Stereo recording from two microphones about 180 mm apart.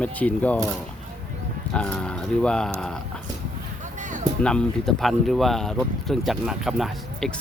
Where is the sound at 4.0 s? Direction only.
45° right (ahead or behind).